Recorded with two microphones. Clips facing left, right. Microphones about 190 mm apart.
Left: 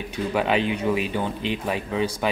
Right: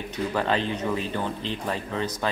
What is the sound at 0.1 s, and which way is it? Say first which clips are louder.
Speech: left 3 dB; 10° left (ahead or behind).